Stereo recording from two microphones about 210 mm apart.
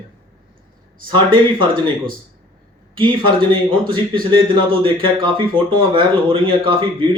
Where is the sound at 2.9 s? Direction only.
25° right (ahead or behind).